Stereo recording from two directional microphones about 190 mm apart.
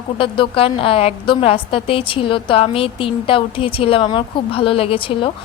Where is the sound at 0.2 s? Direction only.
30° left (ahead or behind).